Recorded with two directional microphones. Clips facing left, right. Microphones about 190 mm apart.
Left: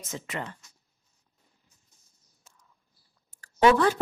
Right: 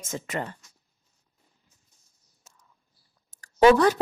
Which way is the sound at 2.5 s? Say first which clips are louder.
Right 2 dB; 45° right (ahead or behind).